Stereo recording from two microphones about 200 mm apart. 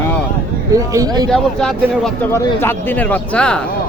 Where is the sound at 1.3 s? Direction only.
Centre (ahead or behind).